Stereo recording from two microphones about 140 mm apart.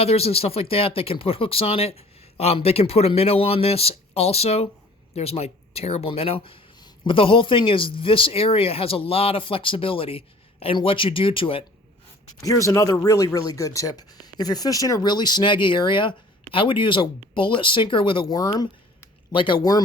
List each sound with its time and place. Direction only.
0.0 s speech: 45° left (ahead or behind)
12.4 s speech: 25° left (ahead or behind)